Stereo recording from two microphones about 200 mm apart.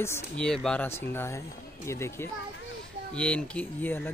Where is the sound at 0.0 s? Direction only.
10° left (ahead or behind).